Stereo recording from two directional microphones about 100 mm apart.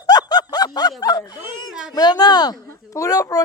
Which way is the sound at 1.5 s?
50° left (ahead or behind).